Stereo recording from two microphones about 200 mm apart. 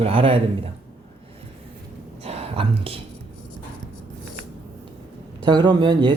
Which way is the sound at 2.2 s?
30° right (ahead or behind).